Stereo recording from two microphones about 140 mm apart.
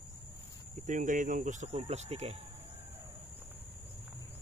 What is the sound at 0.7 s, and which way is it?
Speech, 60° right (ahead or behind).